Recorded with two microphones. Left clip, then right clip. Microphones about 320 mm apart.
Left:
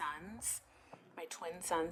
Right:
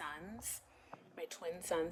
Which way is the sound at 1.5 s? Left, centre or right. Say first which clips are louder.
Right 2 dB; left.